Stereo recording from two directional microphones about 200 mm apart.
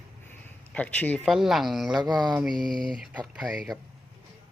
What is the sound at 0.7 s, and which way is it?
Speech, 10° left (ahead or behind).